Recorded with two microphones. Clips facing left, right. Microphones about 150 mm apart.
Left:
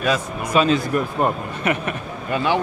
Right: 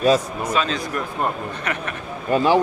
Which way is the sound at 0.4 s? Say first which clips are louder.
Left 5 dB; 10° left (ahead or behind).